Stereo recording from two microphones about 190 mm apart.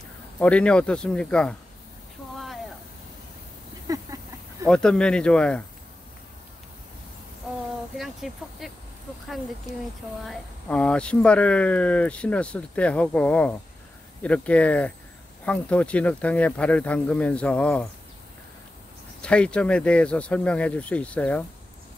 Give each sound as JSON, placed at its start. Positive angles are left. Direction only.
{"t": 0.4, "sound": "speech", "side_deg": 5}
{"t": 2.3, "sound": "a sound", "side_deg": 0}
{"t": 3.8, "sound": "a sound", "side_deg": -20}
{"t": 4.6, "sound": "speech", "side_deg": 5}
{"t": 8.0, "sound": "speech", "side_deg": 0}
{"t": 10.2, "sound": "speech", "side_deg": 0}
{"t": 19.2, "sound": "speech", "side_deg": 5}